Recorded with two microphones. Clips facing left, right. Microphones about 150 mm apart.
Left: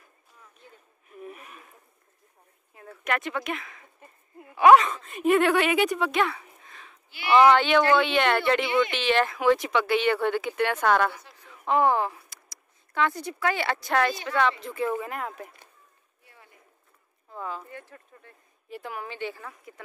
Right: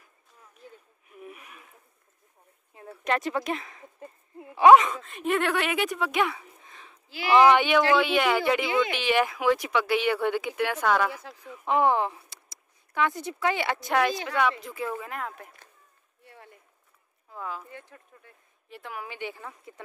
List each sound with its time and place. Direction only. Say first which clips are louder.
0.6 s a sound: right 4 dB; 10° right (ahead or behind)
2.7 s speech: right 2 dB; 25° right (ahead or behind)
5.0 s a woman's voice: left 5 dB; 5° left (ahead or behind)
6.1 s a sound: left 1 dB; 15° right (ahead or behind)
7.3 s speech: left 1 dB; 15° right (ahead or behind)
15.0 s a woman's voice: left 3 dB; 5° left (ahead or behind)
17.3 s speech: left 1 dB; 5° right (ahead or behind)
17.6 s speech: left 2 dB; 15° right (ahead or behind)
18.7 s a woman's voice: left 3 dB; centre (ahead or behind)
19.0 s speech: left 2 dB; 15° right (ahead or behind)